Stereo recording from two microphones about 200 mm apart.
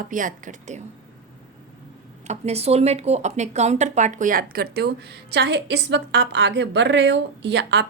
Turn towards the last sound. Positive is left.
turn(degrees=-60)  # may be behind; listen again after turning